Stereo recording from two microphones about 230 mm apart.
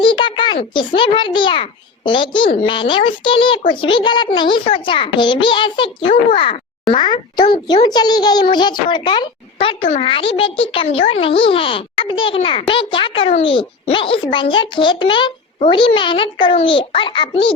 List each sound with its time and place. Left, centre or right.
0.0 s a child's voice: left